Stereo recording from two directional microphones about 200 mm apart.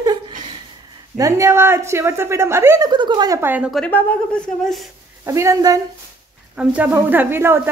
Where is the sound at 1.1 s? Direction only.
15° right (ahead or behind).